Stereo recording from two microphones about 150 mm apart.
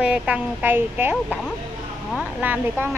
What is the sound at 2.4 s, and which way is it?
Speech, 10° right (ahead or behind).